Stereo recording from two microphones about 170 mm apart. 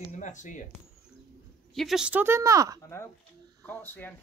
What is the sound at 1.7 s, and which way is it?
Speech, centre (ahead or behind).